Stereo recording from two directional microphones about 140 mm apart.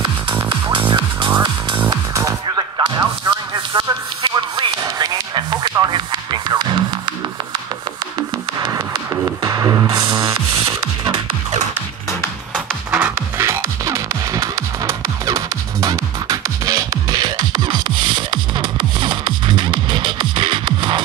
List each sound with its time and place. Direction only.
0.5 s music: 35° right (ahead or behind)
1.9 s music: 25° right (ahead or behind)
3.3 s a sound: 35° right (ahead or behind)
8.2 s music: 30° right (ahead or behind)
12.5 s music: 10° right (ahead or behind); by 21.0 s 35° right (ahead or behind)